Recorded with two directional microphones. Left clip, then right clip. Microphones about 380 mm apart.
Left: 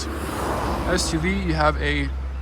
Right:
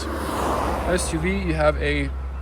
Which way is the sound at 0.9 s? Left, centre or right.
Centre.